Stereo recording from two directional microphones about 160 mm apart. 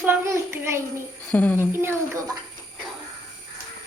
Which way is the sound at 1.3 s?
10° left (ahead or behind).